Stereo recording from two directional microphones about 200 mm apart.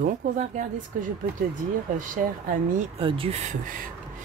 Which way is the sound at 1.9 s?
40° right (ahead or behind).